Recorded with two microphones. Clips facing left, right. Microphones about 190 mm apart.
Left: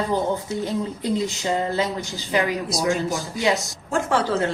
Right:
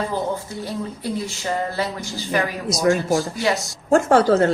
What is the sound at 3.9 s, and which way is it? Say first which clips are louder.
Speech: right 7 dB; 45° right (ahead or behind).